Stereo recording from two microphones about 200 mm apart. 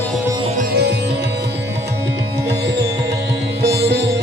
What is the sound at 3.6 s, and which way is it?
Sitar, 55° right (ahead or behind).